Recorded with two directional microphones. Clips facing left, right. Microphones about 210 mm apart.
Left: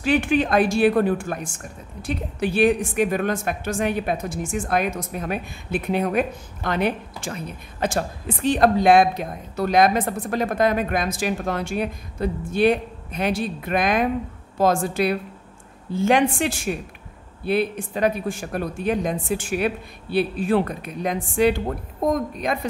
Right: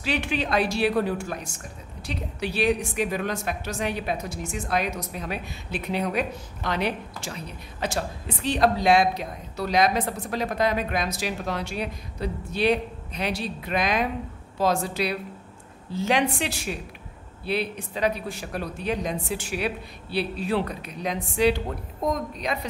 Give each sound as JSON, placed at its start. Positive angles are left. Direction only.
{"t": 0.0, "sound": "a woman's voice", "side_deg": 50}